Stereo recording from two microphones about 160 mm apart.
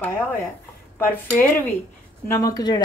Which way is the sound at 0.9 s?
10° left (ahead or behind).